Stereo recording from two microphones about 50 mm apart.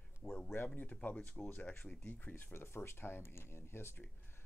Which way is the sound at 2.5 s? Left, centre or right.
Left.